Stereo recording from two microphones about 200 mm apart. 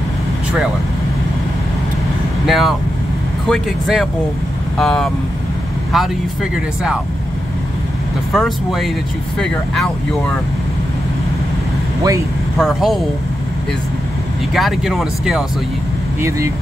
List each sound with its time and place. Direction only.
2.4 s speech: centre (ahead or behind)
8.3 s speech: centre (ahead or behind)
12.0 s speech: 15° right (ahead or behind)
12.5 s speech: centre (ahead or behind)
14.5 s speech: centre (ahead or behind)
16.2 s speech: 15° right (ahead or behind)